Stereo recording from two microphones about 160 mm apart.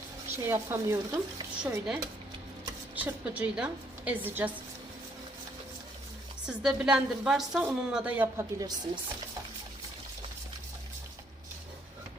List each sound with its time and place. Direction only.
0.3 s a woman's voice: 15° right (ahead or behind)
6.4 s a woman's voice: 5° right (ahead or behind)
8.5 s chopping: 25° right (ahead or behind)